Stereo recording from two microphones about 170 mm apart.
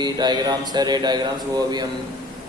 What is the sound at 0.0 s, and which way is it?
Speech, 25° right (ahead or behind).